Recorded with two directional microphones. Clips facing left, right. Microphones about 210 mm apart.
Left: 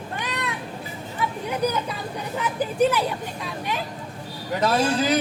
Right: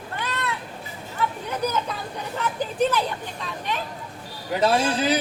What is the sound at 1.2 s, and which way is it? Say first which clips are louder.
Speech: right 1 dB; 15° left (ahead or behind).